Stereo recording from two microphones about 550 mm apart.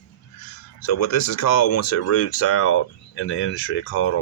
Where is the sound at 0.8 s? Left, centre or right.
Left.